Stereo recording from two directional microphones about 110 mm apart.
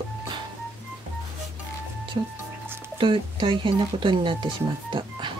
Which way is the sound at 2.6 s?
20° right (ahead or behind).